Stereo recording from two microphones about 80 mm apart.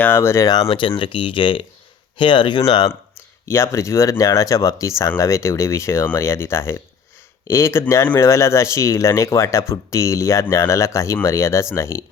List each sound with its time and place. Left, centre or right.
0.0 s speech: left
0.4 s speech: left
0.7 s speech: left
3.5 s speech: left